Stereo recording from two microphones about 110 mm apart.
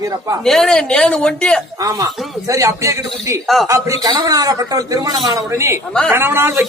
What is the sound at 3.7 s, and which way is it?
A man's voice, 30° right (ahead or behind).